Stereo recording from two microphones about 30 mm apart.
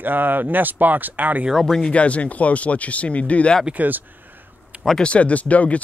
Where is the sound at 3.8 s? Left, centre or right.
Right.